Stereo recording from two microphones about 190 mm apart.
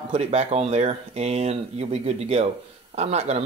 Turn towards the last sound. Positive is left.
turn(degrees=-35)  # may be behind; listen again after turning